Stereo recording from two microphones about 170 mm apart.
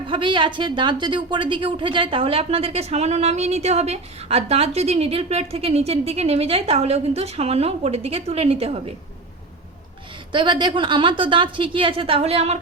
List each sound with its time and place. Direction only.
0.1 s a woman's voice: 30° right (ahead or behind)
10.3 s a woman's voice: 25° right (ahead or behind)